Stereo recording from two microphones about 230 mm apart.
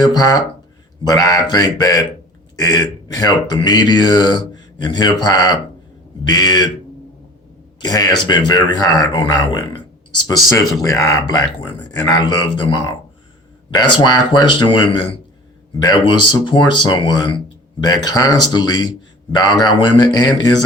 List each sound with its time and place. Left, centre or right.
0.0 s speech: centre
7.8 s speech: centre
10.8 s speech: centre